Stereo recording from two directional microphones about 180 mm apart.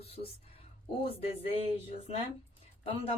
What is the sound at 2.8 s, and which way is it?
Speech, 30° left (ahead or behind).